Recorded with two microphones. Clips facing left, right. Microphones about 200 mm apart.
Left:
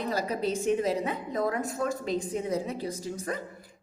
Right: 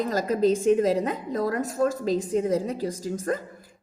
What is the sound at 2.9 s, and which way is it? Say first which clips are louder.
Speech: right 4 dB; 90° right.